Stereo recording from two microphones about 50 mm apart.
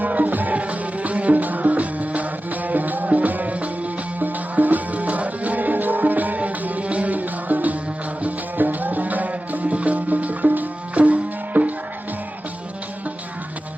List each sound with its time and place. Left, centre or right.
0.0 s music: right